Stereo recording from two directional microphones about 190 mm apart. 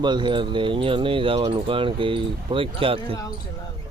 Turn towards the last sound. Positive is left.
turn(degrees=-30)  # may be behind; listen again after turning